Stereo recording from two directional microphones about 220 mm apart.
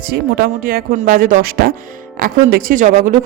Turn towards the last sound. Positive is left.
turn(degrees=-35)  # may be behind; listen again after turning